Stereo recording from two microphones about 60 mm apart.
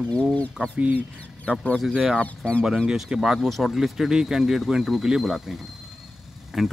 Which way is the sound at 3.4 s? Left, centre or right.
Centre.